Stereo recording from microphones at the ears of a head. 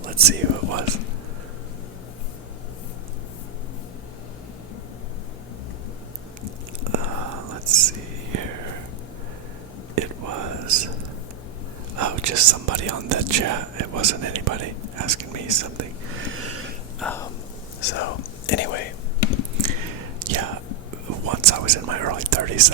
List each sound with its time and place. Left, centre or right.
6.9 s whispering: right
9.9 s whispering: right
17.0 s whispering: left
19.7 s whispering: right